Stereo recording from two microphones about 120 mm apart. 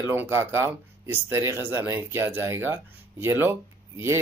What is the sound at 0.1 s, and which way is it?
Speech, 20° right (ahead or behind).